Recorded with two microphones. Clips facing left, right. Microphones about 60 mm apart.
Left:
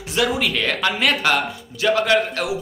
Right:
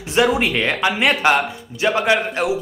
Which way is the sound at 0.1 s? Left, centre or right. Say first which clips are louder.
Right 4 dB; right.